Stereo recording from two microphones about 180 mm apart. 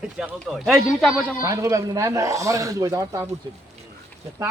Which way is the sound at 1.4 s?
20° right (ahead or behind).